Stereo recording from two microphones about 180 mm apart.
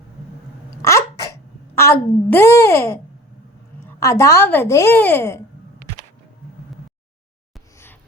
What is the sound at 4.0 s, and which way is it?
A woman's voice, 15° left (ahead or behind).